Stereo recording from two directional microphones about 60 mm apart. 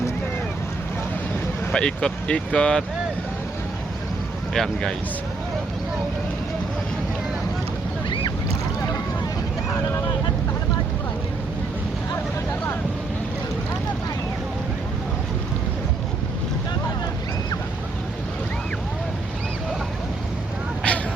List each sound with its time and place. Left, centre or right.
1.7 s speech: centre
4.5 s speech: centre
20.9 s vehicle: centre